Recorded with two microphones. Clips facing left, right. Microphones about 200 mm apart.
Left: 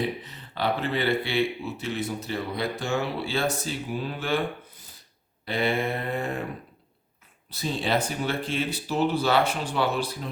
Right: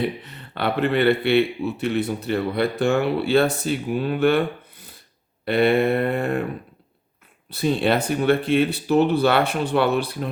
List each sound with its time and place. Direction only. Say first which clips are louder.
0.3 s speech: right 2 dB; 60° right (ahead or behind)
7.5 s speech: right 6 dB; 60° right (ahead or behind)